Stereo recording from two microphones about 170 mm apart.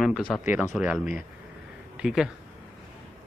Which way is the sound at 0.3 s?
Centre (ahead or behind).